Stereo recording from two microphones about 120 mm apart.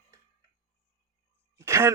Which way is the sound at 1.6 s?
25° right (ahead or behind).